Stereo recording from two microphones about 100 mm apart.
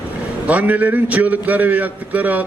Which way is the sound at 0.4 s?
15° right (ahead or behind).